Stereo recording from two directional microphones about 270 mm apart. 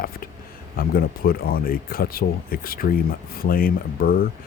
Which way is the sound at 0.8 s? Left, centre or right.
Left.